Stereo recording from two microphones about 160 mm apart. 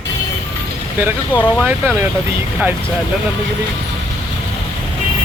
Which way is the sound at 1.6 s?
10° right (ahead or behind).